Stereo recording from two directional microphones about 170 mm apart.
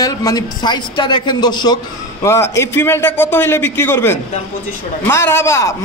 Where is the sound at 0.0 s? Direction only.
20° left (ahead or behind).